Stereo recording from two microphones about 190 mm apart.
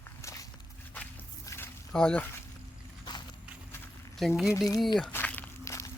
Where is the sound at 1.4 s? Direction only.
10° left (ahead or behind).